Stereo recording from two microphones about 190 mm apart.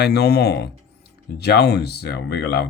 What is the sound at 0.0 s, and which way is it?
Speech, 60° left (ahead or behind).